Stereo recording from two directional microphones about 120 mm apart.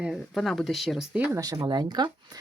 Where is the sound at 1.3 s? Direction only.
30° right (ahead or behind).